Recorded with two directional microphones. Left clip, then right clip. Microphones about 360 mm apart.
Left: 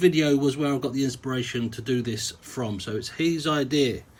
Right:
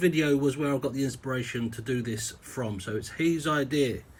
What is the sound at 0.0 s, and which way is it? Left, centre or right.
Speech, centre.